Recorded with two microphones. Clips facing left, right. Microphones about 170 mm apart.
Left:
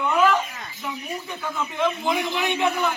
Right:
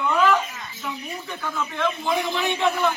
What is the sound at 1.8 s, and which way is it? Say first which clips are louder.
A man's voice: left 1 dB; 15° left (ahead or behind).